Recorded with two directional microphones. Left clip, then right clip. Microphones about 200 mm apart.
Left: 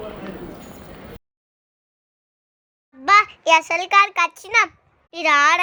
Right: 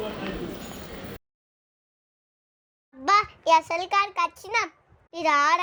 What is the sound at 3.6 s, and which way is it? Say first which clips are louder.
A child's voice: left 8 dB; 5° left (ahead or behind).